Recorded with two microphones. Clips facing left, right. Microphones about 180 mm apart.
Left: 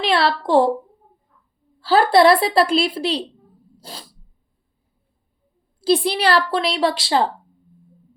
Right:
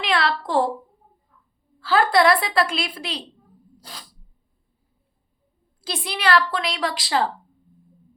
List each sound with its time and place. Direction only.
0.0 s a woman's voice: 30° left (ahead or behind)
1.8 s a woman's voice: 30° left (ahead or behind)
3.8 s sneeze: 30° left (ahead or behind)
5.8 s a woman's voice: 30° left (ahead or behind)